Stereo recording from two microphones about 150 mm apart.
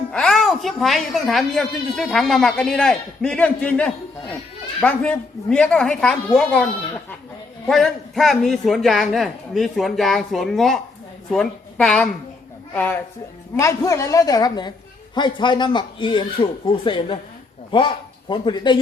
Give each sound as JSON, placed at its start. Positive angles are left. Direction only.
{"t": 0.1, "sound": "a woman's voice", "side_deg": 5}